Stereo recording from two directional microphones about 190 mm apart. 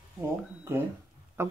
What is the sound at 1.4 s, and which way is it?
Speech, 15° right (ahead or behind).